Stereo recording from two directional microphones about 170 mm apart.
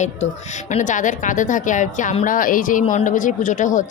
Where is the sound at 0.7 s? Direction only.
45° left (ahead or behind).